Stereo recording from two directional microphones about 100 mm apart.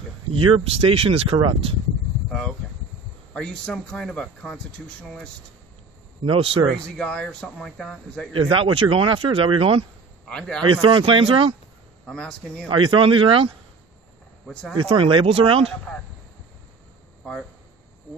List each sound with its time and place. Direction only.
0.3 s speech: 70° right (ahead or behind)
1.4 s speech: 55° right (ahead or behind)
2.2 s speech: 5° left (ahead or behind)
6.2 s speech: 65° right (ahead or behind)
7.0 s speech: 10° left (ahead or behind)
8.5 s speech: 60° right (ahead or behind)
10.2 s a man's voice: 5° left (ahead or behind)
10.6 s speech: 65° right (ahead or behind)
12.1 s speech: 10° left (ahead or behind)
12.6 s speech: 60° right (ahead or behind)
14.5 s speech: 5° left (ahead or behind)
14.8 s speech: 55° right (ahead or behind)
17.2 s a sound: 10° left (ahead or behind)